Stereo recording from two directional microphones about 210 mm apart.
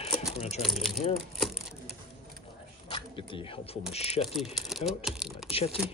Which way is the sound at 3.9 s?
30° left (ahead or behind).